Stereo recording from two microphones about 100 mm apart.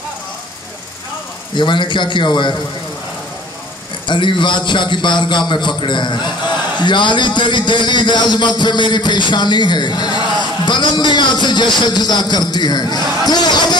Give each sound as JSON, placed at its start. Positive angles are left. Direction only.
{"t": 1.5, "sound": "a man's voice", "side_deg": 50}
{"t": 4.1, "sound": "a man's voice", "side_deg": 50}